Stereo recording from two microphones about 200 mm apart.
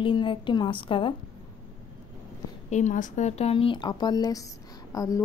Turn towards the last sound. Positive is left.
turn(degrees=15)  # may be behind; listen again after turning